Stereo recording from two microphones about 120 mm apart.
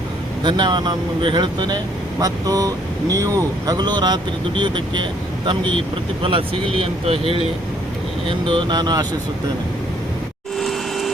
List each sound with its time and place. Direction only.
0.4 s speech: 40° right (ahead or behind)
6.2 s speech: 50° right (ahead or behind)
10.6 s a sound: centre (ahead or behind)